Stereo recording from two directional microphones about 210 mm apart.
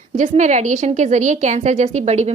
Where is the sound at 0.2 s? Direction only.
35° right (ahead or behind).